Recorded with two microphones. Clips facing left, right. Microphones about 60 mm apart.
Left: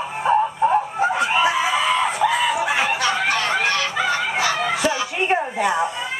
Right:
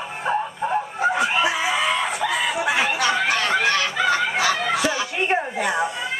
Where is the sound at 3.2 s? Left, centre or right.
Left.